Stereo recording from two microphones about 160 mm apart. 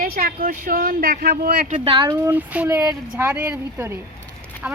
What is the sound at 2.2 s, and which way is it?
A woman's voice, 10° right (ahead or behind).